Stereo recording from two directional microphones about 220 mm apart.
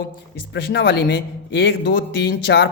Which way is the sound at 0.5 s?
50° left (ahead or behind).